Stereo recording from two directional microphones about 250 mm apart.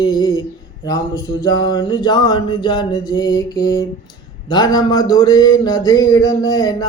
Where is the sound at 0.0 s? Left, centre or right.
Centre.